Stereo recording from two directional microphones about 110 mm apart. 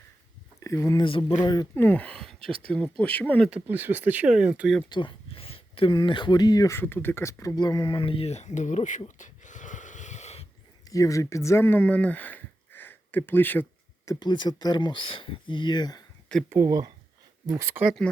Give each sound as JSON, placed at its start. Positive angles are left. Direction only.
{"t": 0.6, "sound": "speech", "side_deg": 30}
{"t": 1.4, "sound": "speech", "side_deg": 40}
{"t": 1.7, "sound": "speech", "side_deg": 15}
{"t": 3.5, "sound": "speech", "side_deg": -20}
{"t": 4.9, "sound": "a sound", "side_deg": 45}
{"t": 5.9, "sound": "speech", "side_deg": 45}
{"t": 6.7, "sound": "speech", "side_deg": 20}
{"t": 7.5, "sound": "speech", "side_deg": 40}
{"t": 10.8, "sound": "speech", "side_deg": 30}
{"t": 14.0, "sound": "speech", "side_deg": 35}
{"t": 16.5, "sound": "speech", "side_deg": -20}